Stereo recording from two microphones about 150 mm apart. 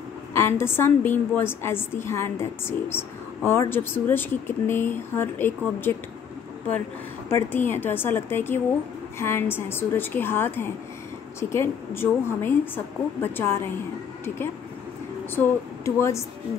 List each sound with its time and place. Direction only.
0.3 s a woman's voice: 15° left (ahead or behind)
7.2 s a woman's voice: 15° left (ahead or behind)
15.3 s a woman's voice: 15° left (ahead or behind)